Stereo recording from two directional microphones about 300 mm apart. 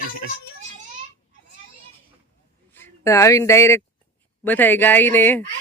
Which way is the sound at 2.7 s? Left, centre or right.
Centre.